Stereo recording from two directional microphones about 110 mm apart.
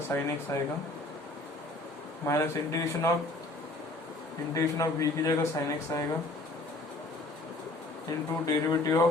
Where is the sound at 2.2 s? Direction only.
25° left (ahead or behind).